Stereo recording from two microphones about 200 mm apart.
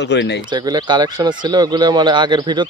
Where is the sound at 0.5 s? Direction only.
20° right (ahead or behind).